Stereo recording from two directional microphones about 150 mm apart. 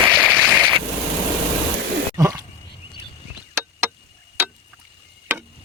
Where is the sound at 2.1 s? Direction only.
20° right (ahead or behind).